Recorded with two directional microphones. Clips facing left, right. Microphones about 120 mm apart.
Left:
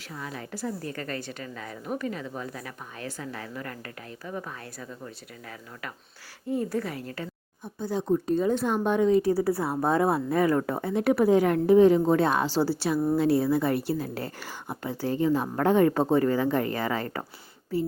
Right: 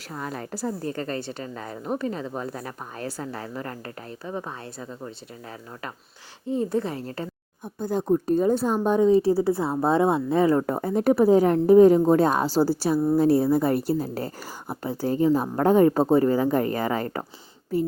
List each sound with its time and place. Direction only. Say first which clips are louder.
0.1 s a woman's voice: right 4 dB; 45° right (ahead or behind); by 5.1 s 25° right (ahead or behind)
6.5 s a woman's voice: right 3 dB; 25° right (ahead or behind)
7.8 s a woman's voice: right 3 dB; 50° right (ahead or behind); by 10.7 s 25° right (ahead or behind)
10.7 s a woman's voice: right 3 dB; 40° right (ahead or behind)